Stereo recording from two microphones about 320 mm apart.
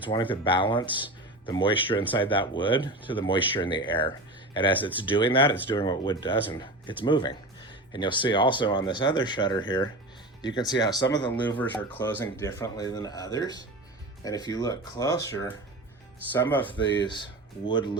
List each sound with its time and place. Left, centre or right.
0.0 s speech: centre